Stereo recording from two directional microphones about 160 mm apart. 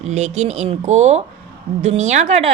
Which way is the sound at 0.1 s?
45° right (ahead or behind).